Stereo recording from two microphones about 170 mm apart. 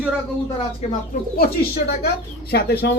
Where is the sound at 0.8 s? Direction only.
40° left (ahead or behind).